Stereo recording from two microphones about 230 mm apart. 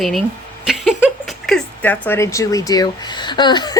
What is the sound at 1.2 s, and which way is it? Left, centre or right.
Speech, centre.